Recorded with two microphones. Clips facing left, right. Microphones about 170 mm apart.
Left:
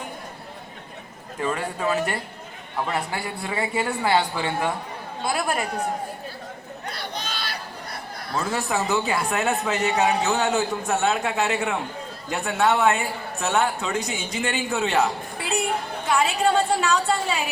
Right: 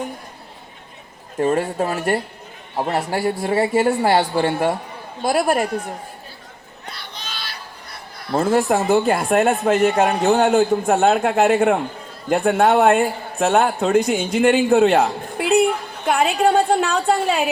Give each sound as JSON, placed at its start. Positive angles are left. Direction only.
{"t": 1.4, "sound": "speech", "side_deg": -45}
{"t": 6.8, "sound": "chatter", "side_deg": 55}
{"t": 8.3, "sound": "a woman's voice", "side_deg": -50}